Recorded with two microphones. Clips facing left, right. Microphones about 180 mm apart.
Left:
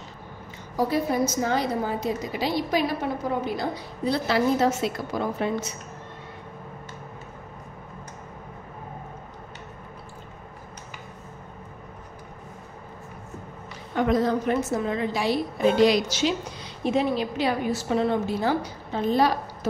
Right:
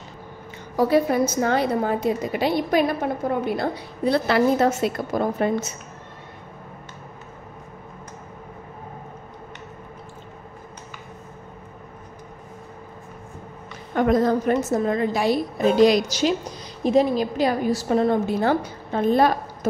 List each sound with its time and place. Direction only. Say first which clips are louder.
0.7 s a woman's voice: right 5 dB; 65° right (ahead or behind); by 5.7 s 45° right (ahead or behind)
13.9 s a woman's voice: right 3 dB; 50° right (ahead or behind)